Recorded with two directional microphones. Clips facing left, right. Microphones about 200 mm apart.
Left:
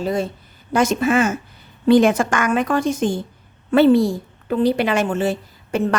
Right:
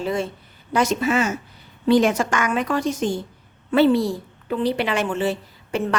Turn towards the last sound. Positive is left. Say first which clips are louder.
# left 3 dB
turn(degrees=45)  # may be behind; listen again after turning